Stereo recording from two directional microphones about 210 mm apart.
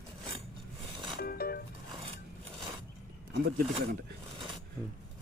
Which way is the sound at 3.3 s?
45° right (ahead or behind).